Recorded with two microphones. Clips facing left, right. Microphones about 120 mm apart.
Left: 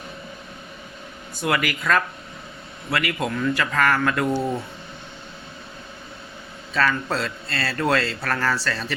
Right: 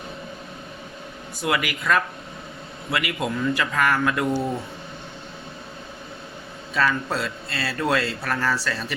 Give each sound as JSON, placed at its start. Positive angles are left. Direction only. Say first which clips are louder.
{"t": 1.5, "sound": "speech", "louder": "left 1 dB", "side_deg": -5}
{"t": 6.7, "sound": "speech", "louder": "left 1 dB", "side_deg": -10}